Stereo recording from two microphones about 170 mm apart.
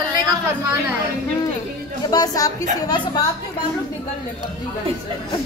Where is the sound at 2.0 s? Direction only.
20° left (ahead or behind).